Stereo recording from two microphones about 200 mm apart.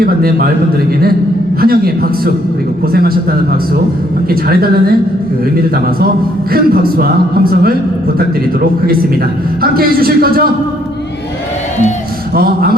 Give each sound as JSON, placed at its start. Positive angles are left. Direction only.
{"t": 0.0, "sound": "speech", "side_deg": -50}
{"t": 1.6, "sound": "speech", "side_deg": -50}
{"t": 4.3, "sound": "speech", "side_deg": -50}
{"t": 9.6, "sound": "speech", "side_deg": -50}
{"t": 12.3, "sound": "speech", "side_deg": -50}